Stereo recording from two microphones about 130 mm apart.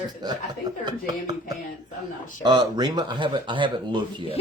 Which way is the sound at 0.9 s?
35° right (ahead or behind).